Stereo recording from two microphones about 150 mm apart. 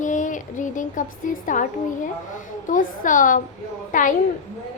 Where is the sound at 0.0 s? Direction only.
55° left (ahead or behind).